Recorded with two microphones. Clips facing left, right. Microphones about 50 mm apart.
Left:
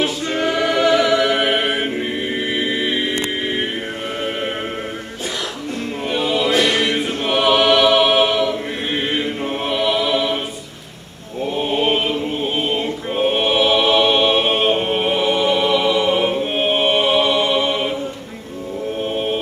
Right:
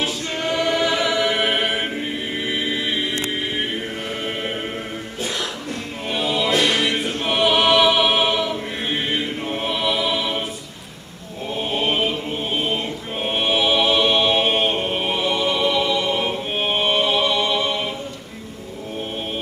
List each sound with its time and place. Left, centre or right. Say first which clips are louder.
0.4 s music: left 3 dB; centre
2.5 s a capella: left 3 dB; centre
6.1 s choir: left 3 dB; centre
9.7 s music: left 4 dB; centre
11.7 s chant: left 2 dB; centre
12.5 s choir: left 3 dB; centre
14.8 s music: left 4 dB; left
15.0 s music: left 5 dB; centre